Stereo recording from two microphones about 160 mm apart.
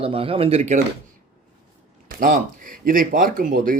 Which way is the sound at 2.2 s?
60° right (ahead or behind).